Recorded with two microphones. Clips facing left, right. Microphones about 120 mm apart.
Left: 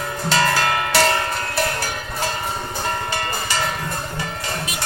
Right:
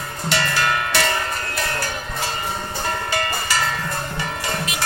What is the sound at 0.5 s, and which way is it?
Music, 45° left (ahead or behind).